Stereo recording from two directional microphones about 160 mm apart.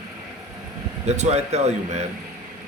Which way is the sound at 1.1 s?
45° right (ahead or behind).